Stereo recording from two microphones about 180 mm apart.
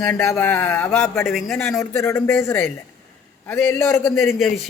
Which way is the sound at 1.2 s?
Centre (ahead or behind).